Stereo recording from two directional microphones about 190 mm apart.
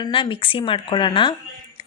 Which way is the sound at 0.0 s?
25° left (ahead or behind).